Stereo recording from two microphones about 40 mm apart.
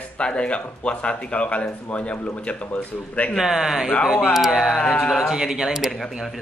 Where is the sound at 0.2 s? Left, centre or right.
Left.